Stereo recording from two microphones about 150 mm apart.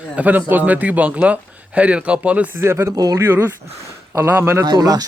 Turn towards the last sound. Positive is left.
turn(degrees=-25)  # may be behind; listen again after turning